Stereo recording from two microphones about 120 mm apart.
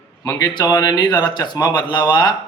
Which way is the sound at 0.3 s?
30° left (ahead or behind).